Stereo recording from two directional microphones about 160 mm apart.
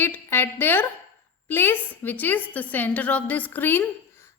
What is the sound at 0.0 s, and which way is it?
A woman's voice, 15° left (ahead or behind).